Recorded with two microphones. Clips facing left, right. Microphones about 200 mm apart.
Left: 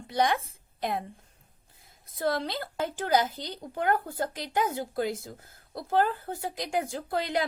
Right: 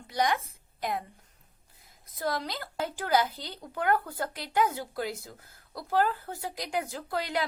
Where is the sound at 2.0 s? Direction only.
30° left (ahead or behind).